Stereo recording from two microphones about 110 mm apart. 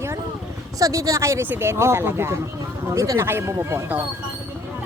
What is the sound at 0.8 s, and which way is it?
Speech, 30° right (ahead or behind).